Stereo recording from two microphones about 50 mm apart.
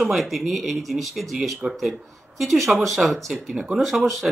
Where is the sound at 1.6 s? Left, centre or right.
Centre.